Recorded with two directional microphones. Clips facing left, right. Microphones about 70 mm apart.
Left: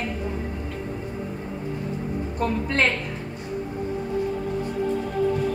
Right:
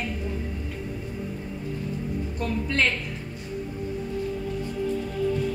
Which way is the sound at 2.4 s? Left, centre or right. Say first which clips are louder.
Left 3 dB; left.